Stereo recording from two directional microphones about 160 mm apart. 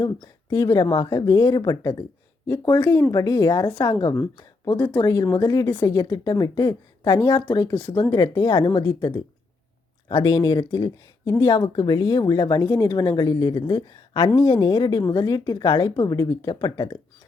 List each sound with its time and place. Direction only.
0.0 s speech: 25° left (ahead or behind)